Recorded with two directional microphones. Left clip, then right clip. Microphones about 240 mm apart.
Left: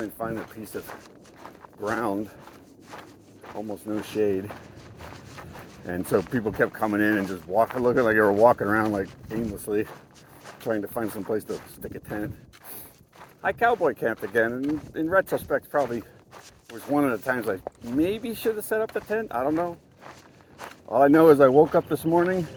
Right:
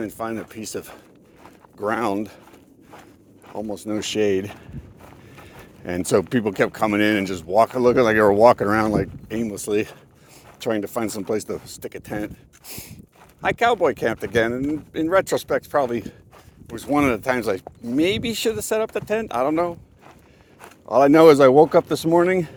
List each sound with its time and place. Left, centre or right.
0.0 s speech: right
3.5 s speech: right
5.8 s speech: right
13.4 s speech: right
20.8 s speech: right